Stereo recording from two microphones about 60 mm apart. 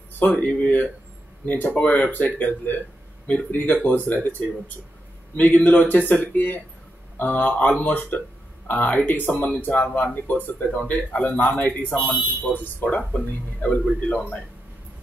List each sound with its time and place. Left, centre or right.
0.2 s speech: left
12.0 s speech: centre
12.4 s speech: left